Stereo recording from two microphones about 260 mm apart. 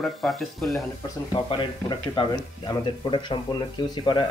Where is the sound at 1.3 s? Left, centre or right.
Centre.